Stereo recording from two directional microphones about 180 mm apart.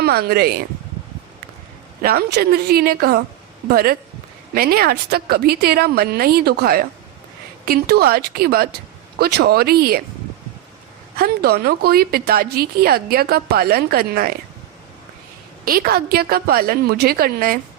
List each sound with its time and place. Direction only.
0.0 s a woman's voice: 60° right (ahead or behind)
2.0 s a woman's voice: 60° right (ahead or behind)
11.2 s a woman's voice: 60° right (ahead or behind)
15.6 s a woman's voice: 55° right (ahead or behind)